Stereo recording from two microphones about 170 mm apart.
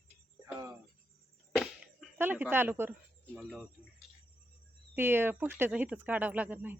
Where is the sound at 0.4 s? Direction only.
15° right (ahead or behind).